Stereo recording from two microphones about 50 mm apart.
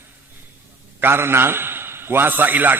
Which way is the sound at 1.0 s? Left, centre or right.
Right.